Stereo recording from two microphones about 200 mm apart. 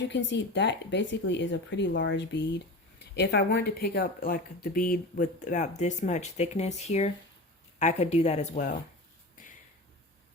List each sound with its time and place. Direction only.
0.0 s speech: 65° left (ahead or behind); by 8.8 s 40° left (ahead or behind)